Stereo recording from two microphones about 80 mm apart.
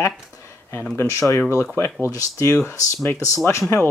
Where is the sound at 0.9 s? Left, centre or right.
Left.